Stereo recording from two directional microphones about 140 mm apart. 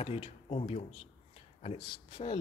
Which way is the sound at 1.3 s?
45° left (ahead or behind).